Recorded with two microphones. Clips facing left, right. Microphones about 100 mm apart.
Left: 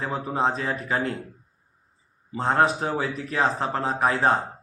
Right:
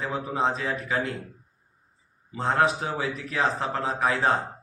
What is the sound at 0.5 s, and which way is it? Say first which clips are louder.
Speech: left 1 dB; 40° left (ahead or behind).